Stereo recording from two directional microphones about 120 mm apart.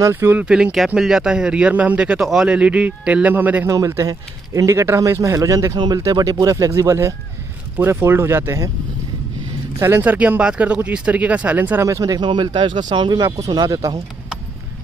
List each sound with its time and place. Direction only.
0.0 s speech: 20° right (ahead or behind)
3.7 s a man's voice: 25° right (ahead or behind)
9.8 s speech: 20° right (ahead or behind)
11.8 s speech: 30° right (ahead or behind)